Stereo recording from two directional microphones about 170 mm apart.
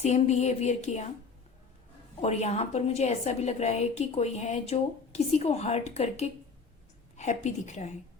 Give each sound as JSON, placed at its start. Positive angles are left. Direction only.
{"t": 0.0, "sound": "a woman's voice", "side_deg": 40}
{"t": 2.2, "sound": "a woman's voice", "side_deg": 40}